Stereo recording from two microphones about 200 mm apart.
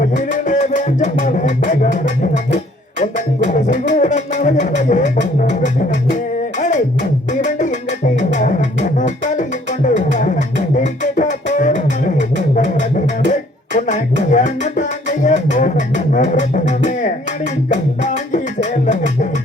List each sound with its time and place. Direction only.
0.0 s music: 40° left (ahead or behind)